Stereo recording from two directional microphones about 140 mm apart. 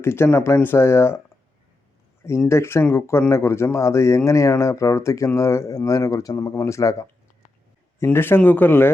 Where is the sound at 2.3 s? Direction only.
20° left (ahead or behind).